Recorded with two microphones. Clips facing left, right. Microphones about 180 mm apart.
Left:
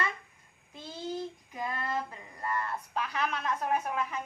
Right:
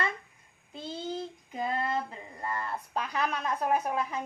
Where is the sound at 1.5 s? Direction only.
25° right (ahead or behind).